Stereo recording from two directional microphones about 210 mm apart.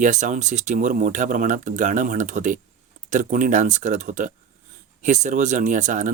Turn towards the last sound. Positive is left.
turn(degrees=-35)  # may be behind; listen again after turning